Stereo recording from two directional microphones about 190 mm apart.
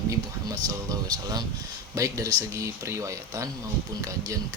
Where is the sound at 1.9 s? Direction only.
15° right (ahead or behind).